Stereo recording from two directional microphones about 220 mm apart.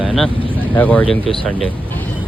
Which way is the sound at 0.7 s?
5° left (ahead or behind).